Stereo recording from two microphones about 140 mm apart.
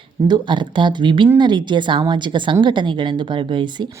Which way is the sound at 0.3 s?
35° right (ahead or behind).